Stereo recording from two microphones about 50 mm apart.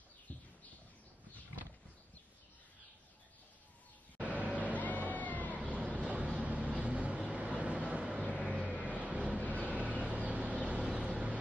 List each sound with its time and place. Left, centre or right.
0.3 s a sound: left
4.2 s vehicle: right
4.7 s cat: left
5.9 s vehicle: right